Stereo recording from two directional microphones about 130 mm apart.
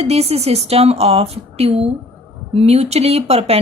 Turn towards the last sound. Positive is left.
turn(degrees=-50)  # may be behind; listen again after turning